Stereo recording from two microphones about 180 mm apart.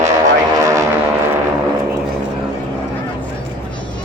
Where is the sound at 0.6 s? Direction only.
20° right (ahead or behind).